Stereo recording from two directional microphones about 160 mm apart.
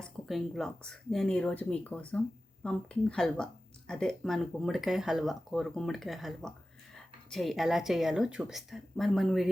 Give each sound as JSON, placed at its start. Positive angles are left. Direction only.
{"t": 0.0, "sound": "speech", "side_deg": 0}